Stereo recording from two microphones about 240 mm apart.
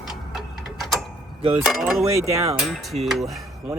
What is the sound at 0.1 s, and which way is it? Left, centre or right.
Tick-tock, centre.